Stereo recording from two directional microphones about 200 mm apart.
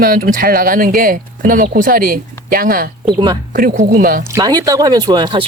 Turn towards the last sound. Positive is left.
turn(degrees=-20)  # may be behind; listen again after turning